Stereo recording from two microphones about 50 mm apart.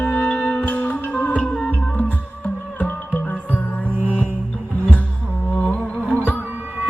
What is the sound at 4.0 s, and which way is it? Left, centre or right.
Music, right.